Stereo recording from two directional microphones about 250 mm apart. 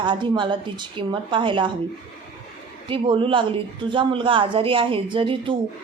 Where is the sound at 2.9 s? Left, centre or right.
Right.